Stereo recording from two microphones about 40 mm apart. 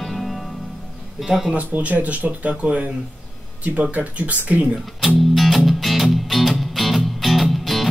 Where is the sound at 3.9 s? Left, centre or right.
Right.